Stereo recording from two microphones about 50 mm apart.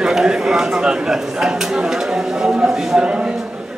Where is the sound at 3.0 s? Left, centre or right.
Centre.